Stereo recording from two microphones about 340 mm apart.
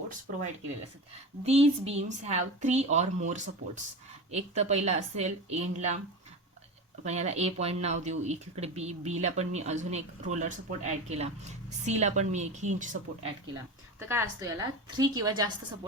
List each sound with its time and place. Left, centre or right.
1.5 s speech: centre
7.0 s speech: centre
14.0 s a woman's voice: centre